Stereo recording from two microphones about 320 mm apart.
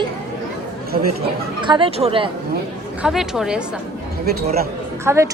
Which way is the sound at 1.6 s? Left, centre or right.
Centre.